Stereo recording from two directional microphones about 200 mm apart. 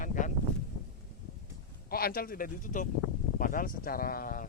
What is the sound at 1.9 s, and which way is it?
Speech, 50° left (ahead or behind).